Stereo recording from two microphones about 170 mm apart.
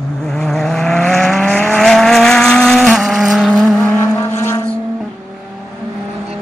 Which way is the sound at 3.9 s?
15° left (ahead or behind).